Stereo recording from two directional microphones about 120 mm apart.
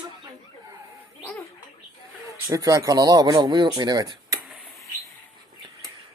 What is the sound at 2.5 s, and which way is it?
Speech, 25° right (ahead or behind).